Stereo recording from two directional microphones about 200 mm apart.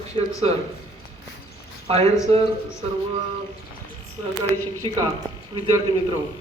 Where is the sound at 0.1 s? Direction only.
25° right (ahead or behind).